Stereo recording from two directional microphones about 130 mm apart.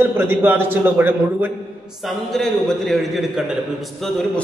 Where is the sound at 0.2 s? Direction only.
15° right (ahead or behind).